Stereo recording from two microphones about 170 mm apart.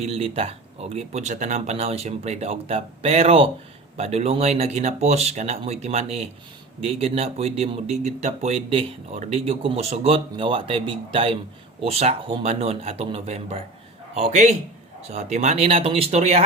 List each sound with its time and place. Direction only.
0.0 s speech: 35° right (ahead or behind)